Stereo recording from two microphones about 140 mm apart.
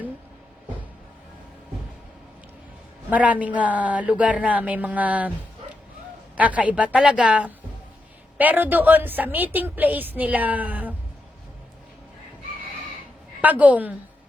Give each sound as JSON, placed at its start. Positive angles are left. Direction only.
{"t": 3.1, "sound": "a woman's voice", "side_deg": -10}
{"t": 6.3, "sound": "a woman's voice", "side_deg": -10}
{"t": 13.4, "sound": "a woman's voice", "side_deg": -10}